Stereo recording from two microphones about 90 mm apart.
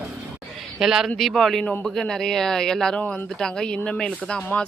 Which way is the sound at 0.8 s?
5° right (ahead or behind).